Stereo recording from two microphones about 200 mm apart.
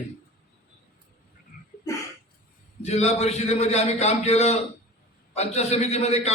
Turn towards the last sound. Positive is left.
turn(degrees=30)  # may be behind; listen again after turning